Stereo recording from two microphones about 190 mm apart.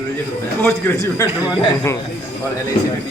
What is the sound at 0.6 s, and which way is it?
A man's voice, 15° left (ahead or behind).